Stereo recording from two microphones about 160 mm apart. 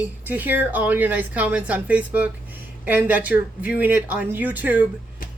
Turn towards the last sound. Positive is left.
turn(degrees=-10)  # may be behind; listen again after turning